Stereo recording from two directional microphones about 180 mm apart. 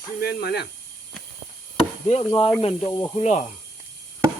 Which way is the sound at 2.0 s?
35° left (ahead or behind).